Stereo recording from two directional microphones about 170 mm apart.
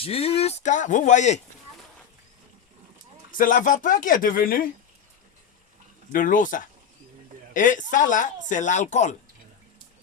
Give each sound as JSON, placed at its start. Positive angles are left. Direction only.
{"t": 0.0, "sound": "speech", "side_deg": 35}
{"t": 3.3, "sound": "speech", "side_deg": 50}
{"t": 6.1, "sound": "speech", "side_deg": 50}